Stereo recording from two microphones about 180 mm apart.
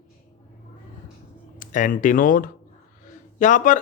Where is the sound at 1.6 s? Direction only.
45° left (ahead or behind).